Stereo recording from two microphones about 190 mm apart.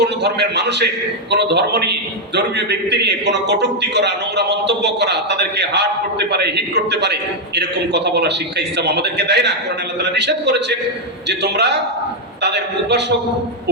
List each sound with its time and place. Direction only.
0.0 s a man's voice: 60° right (ahead or behind)